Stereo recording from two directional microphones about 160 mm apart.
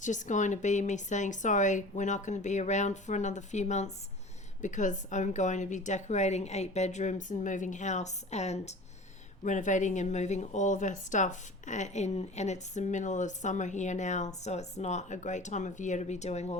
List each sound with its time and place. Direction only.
0.0 s speech: 50° left (ahead or behind)